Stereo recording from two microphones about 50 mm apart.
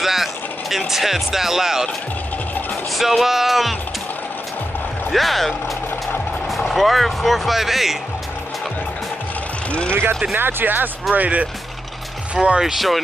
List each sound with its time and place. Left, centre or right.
0.0 s music: centre
2.9 s speech: centre
5.1 s speech: centre
9.8 s speech: right
11.1 s speech: right
12.4 s speech: centre
12.7 s speech: centre